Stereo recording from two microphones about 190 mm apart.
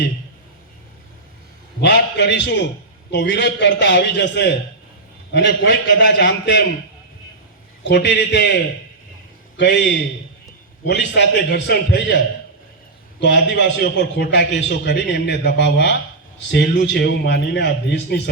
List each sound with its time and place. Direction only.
1.8 s a man's voice: 65° left (ahead or behind)
7.9 s a man's voice: 65° left (ahead or behind)